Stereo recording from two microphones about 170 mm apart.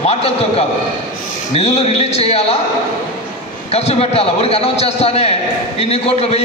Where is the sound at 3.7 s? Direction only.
35° left (ahead or behind).